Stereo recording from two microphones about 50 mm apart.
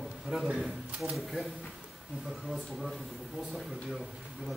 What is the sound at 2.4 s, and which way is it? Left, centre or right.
Speech, centre.